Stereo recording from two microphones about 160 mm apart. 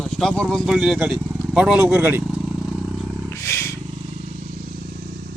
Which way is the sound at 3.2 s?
20° left (ahead or behind).